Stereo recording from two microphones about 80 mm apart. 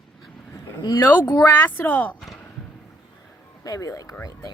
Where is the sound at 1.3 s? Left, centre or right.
Left.